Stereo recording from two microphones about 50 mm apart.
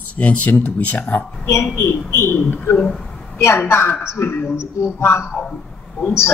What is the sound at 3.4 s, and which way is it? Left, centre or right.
A man's voice, left.